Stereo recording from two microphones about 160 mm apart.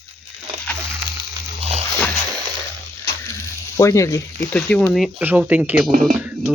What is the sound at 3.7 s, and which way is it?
Speech, 20° left (ahead or behind).